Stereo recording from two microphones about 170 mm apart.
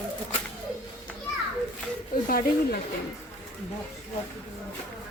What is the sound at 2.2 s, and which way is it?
Speech, 55° left (ahead or behind).